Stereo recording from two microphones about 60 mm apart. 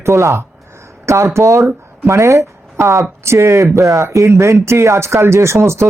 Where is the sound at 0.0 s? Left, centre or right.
Right.